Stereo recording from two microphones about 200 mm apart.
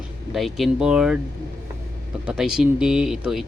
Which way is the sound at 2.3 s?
5° right (ahead or behind).